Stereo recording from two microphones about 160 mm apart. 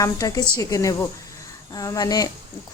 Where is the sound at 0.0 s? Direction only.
20° left (ahead or behind).